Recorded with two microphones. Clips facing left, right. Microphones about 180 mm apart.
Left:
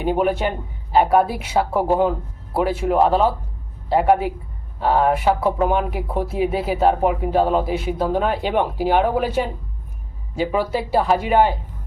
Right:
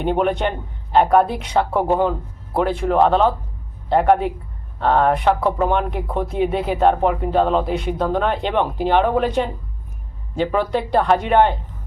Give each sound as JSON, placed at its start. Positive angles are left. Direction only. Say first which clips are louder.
{"t": 0.0, "sound": "speech", "louder": "even", "side_deg": 5}